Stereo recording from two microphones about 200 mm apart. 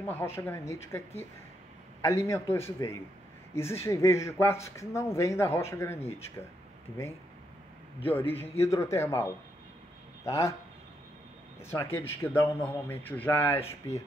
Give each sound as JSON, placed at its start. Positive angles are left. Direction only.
{"t": 0.1, "sound": "speech", "side_deg": 10}
{"t": 5.9, "sound": "speech", "side_deg": 30}
{"t": 8.0, "sound": "speech", "side_deg": 10}
{"t": 11.6, "sound": "speech", "side_deg": 10}